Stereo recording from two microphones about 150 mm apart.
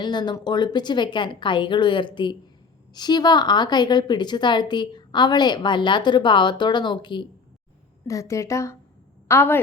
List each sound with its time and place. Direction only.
0.0 s a woman's voice: 30° left (ahead or behind)